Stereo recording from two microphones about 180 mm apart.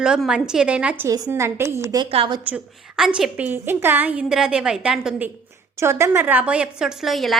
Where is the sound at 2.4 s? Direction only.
5° right (ahead or behind).